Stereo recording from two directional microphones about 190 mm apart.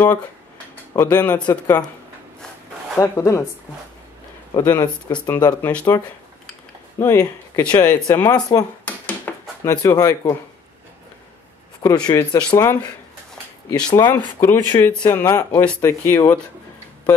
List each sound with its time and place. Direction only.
0.9 s speech: 10° left (ahead or behind)
1.5 s speech: 20° left (ahead or behind)
3.0 s speech: 15° left (ahead or behind)
4.6 s speech: 20° left (ahead or behind)
5.7 s speech: 5° left (ahead or behind)
7.0 s speech: 15° left (ahead or behind)
8.8 s a sound: 10° left (ahead or behind)
11.8 s speech: 15° left (ahead or behind)